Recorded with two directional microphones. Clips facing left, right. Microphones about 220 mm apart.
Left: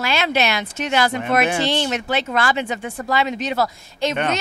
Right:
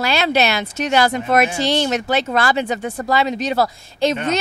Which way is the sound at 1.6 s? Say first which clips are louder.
Right 3 dB; 40° right (ahead or behind).